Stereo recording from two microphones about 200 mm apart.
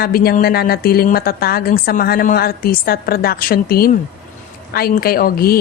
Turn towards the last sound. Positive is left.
turn(degrees=50)  # may be behind; listen again after turning